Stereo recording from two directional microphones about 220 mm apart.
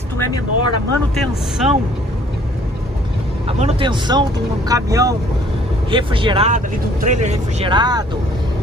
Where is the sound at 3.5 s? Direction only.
25° right (ahead or behind).